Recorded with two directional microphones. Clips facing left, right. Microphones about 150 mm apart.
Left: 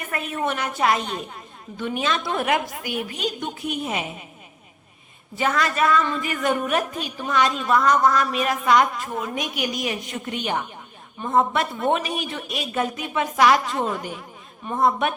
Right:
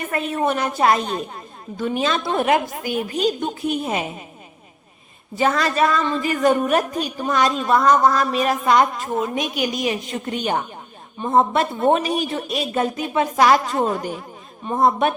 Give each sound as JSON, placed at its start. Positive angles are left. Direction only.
{"t": 0.1, "sound": "a woman's voice", "side_deg": -30}
{"t": 5.4, "sound": "a woman's voice", "side_deg": -30}
{"t": 10.2, "sound": "a woman's voice", "side_deg": -40}